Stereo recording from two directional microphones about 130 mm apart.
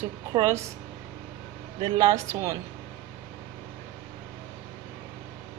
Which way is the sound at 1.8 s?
30° right (ahead or behind).